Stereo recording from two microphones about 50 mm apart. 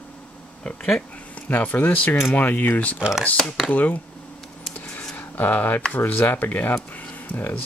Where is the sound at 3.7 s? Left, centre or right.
Left.